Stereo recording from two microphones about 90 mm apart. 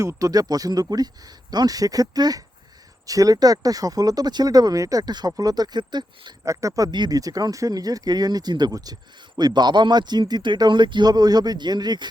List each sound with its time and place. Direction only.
0.0 s speech: 40° right (ahead or behind); by 6.3 s 55° right (ahead or behind)
6.4 s speech: 35° right (ahead or behind)
6.9 s speech: 50° right (ahead or behind)